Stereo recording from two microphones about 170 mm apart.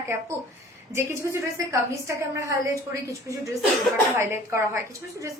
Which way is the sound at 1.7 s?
15° right (ahead or behind).